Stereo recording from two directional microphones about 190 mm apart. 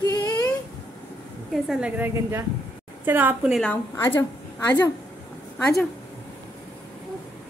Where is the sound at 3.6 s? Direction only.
10° left (ahead or behind).